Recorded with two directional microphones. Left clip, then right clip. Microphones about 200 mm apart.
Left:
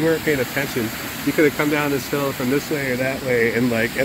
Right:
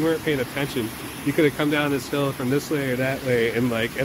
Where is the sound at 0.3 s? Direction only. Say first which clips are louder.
Left 4 dB; centre (ahead or behind).